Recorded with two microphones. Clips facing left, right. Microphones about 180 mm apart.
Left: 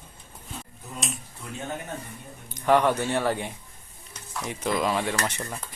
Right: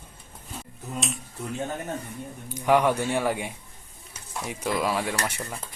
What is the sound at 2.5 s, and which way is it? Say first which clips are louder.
Speech: even; 10° right (ahead or behind).